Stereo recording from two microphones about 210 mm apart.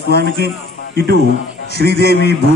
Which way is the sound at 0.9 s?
50° right (ahead or behind).